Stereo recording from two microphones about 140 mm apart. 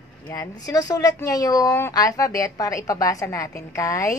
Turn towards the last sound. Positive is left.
turn(degrees=20)  # may be behind; listen again after turning